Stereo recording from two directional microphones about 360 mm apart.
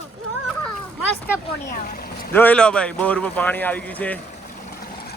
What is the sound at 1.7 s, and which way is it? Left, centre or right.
Speech, left.